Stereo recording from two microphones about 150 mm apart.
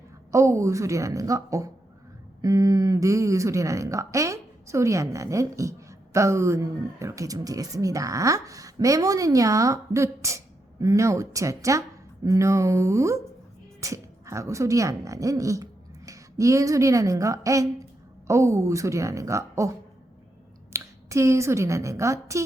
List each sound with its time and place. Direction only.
0.3 s speech: 20° right (ahead or behind)
20.7 s a woman's voice: 20° right (ahead or behind)